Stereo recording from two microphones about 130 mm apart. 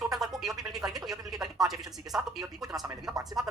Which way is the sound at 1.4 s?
5° right (ahead or behind).